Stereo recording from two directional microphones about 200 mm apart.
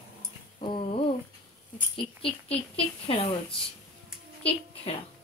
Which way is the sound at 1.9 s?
25° left (ahead or behind).